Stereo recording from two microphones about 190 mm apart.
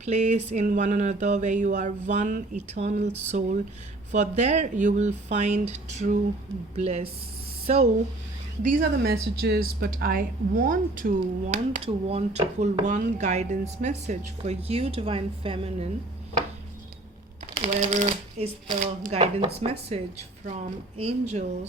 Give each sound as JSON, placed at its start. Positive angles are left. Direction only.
{"t": 0.0, "sound": "a woman's voice", "side_deg": -35}
{"t": 8.8, "sound": "a woman's voice", "side_deg": -55}
{"t": 17.4, "sound": "a woman's voice", "side_deg": -40}